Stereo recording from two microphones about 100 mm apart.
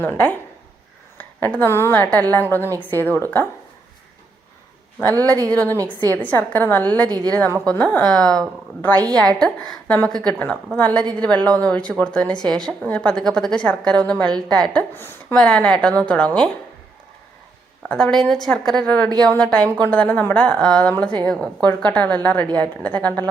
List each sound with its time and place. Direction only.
0.0 s a woman's voice: 20° left (ahead or behind)
4.9 s a woman's voice: 20° left (ahead or behind)
5.7 s a woman's voice: 35° right (ahead or behind)
6.1 s a woman's voice: 20° left (ahead or behind)
14.9 s a woman's voice: 20° left (ahead or behind)
15.4 s a woman's voice: 10° left (ahead or behind)
17.8 s a woman's voice: 5° left (ahead or behind)